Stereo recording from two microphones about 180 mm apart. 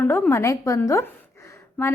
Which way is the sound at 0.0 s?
10° left (ahead or behind).